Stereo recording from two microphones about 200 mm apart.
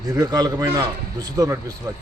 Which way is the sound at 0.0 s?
15° right (ahead or behind).